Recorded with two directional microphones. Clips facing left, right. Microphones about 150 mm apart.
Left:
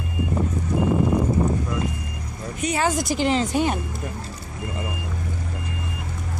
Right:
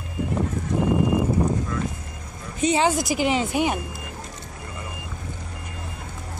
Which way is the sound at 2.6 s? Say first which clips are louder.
Right 3 dB; 25° right (ahead or behind).